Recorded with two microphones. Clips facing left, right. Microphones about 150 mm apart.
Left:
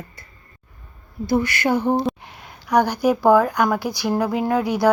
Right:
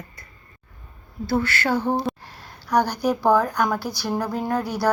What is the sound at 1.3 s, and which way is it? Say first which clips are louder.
A woman's voice: left 3 dB; 15° left (ahead or behind).